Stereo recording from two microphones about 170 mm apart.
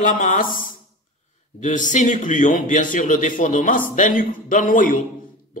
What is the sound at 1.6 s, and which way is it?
Speech, 45° left (ahead or behind).